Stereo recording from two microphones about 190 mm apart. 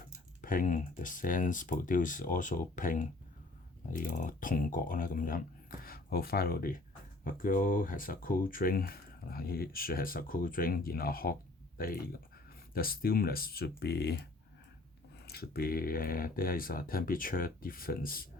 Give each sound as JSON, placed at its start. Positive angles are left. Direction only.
{"t": 0.4, "sound": "speech", "side_deg": 45}
{"t": 12.7, "sound": "speech", "side_deg": 50}
{"t": 15.3, "sound": "speech", "side_deg": 55}